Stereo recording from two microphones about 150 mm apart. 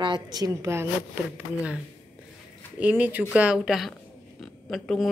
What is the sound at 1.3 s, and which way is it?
Speech, 10° right (ahead or behind).